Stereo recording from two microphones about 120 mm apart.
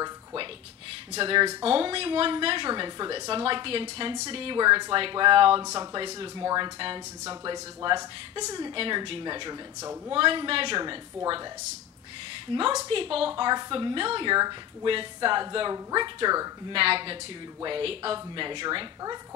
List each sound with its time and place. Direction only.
1.1 s speech: 50° right (ahead or behind)
5.6 s a woman's voice: 30° right (ahead or behind)
8.7 s a woman's voice: 50° right (ahead or behind)
9.8 s speech: 25° right (ahead or behind)
10.1 s speech: 45° right (ahead or behind)
12.8 s speech: 50° right (ahead or behind)
13.3 s a woman's voice: 35° right (ahead or behind)
16.7 s speech: 50° right (ahead or behind)